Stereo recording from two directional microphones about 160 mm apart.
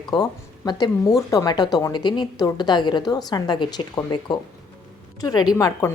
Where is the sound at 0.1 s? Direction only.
25° left (ahead or behind).